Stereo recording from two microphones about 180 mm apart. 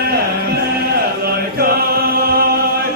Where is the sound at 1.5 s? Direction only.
60° right (ahead or behind).